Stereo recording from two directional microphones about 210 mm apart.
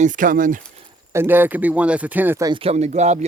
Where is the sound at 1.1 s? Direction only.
10° right (ahead or behind).